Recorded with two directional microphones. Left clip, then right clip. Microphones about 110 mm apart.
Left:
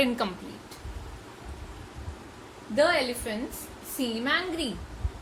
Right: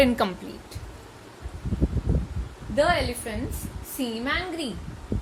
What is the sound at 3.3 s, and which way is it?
A woman's voice, 35° right (ahead or behind).